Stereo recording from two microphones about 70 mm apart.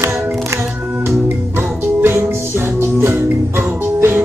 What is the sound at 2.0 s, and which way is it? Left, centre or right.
Music, right.